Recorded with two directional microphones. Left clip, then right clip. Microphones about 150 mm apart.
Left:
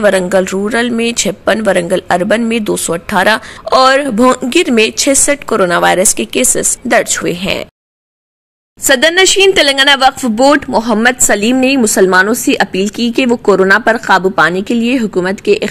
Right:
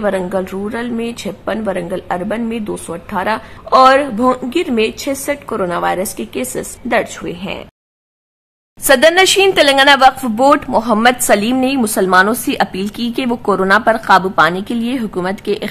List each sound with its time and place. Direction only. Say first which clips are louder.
0.0 s speech: left 7 dB; 30° left (ahead or behind)
8.8 s a woman's voice: left 1 dB; 10° left (ahead or behind)